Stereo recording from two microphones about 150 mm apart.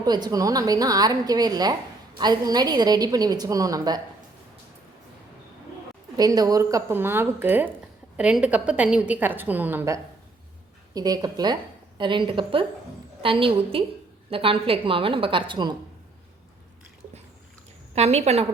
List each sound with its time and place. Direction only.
0.0 s a woman's voice: 25° right (ahead or behind)
6.1 s a woman's voice: 25° right (ahead or behind)
17.9 s a woman's voice: 45° right (ahead or behind)